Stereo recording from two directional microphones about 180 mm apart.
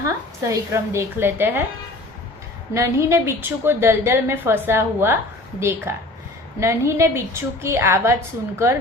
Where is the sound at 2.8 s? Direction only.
15° right (ahead or behind).